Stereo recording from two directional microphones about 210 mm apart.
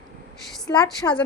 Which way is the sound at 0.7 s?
10° left (ahead or behind).